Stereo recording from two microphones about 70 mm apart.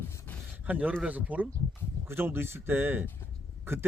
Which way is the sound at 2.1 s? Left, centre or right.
Right.